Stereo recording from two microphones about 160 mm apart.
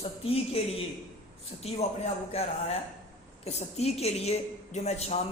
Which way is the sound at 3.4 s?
40° left (ahead or behind).